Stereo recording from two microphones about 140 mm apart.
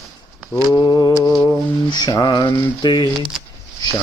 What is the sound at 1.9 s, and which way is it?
Speech, 30° left (ahead or behind).